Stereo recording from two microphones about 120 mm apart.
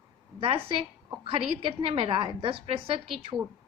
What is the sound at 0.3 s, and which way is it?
A woman's voice, 50° right (ahead or behind).